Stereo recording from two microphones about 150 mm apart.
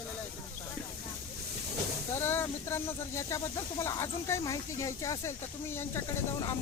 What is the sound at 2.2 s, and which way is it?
Speech, 15° left (ahead or behind).